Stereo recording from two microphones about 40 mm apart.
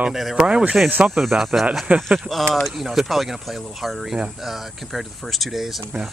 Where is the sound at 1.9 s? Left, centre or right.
Right.